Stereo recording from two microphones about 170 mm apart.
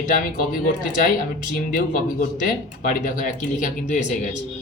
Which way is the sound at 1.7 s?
50° left (ahead or behind).